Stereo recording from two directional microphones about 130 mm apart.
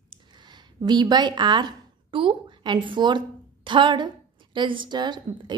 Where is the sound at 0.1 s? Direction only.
35° right (ahead or behind).